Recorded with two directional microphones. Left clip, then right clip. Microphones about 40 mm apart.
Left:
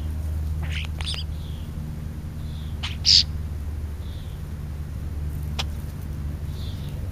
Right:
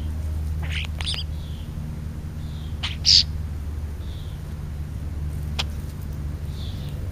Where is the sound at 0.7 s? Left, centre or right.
Right.